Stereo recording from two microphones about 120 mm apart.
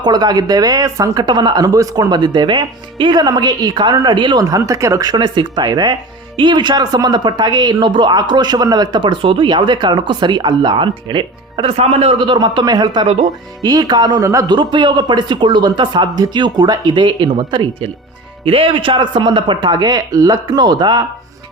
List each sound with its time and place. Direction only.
0.0 s speech: 35° right (ahead or behind)
4.4 s speech: 30° right (ahead or behind)
11.8 s speech: 60° right (ahead or behind); by 14.5 s 25° right (ahead or behind)
14.5 s speech: 40° right (ahead or behind)